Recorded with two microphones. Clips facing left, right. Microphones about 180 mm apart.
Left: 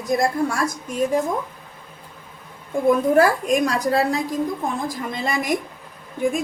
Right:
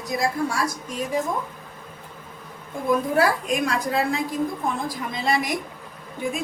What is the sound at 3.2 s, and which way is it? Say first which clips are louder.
A woman's voice: left 4 dB; 45° left (ahead or behind).